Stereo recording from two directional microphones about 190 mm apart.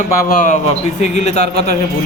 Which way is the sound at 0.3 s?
45° left (ahead or behind).